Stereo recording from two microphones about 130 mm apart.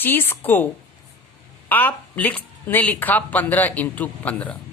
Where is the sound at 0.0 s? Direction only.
15° left (ahead or behind).